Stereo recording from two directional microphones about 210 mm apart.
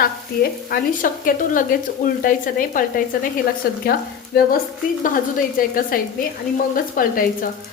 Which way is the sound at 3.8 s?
45° left (ahead or behind).